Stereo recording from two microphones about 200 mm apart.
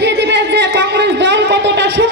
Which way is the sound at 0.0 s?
60° right (ahead or behind).